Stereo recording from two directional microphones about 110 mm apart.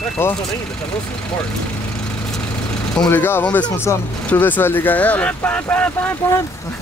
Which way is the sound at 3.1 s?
20° left (ahead or behind).